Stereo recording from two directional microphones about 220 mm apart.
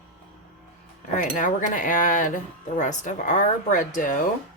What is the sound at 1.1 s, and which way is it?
Cutlery, 35° left (ahead or behind).